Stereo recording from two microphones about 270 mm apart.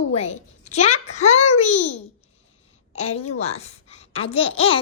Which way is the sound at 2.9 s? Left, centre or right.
Left.